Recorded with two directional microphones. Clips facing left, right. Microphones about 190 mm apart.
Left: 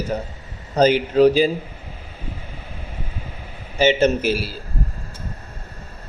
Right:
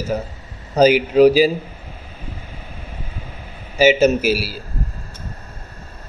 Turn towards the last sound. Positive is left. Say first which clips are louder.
# right 3 dB
turn(degrees=-5)  # may be behind; listen again after turning